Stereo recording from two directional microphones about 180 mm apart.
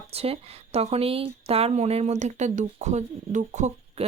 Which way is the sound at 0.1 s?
35° right (ahead or behind).